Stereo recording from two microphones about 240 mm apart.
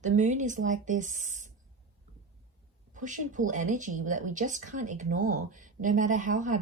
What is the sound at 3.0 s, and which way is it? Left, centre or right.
Speech, right.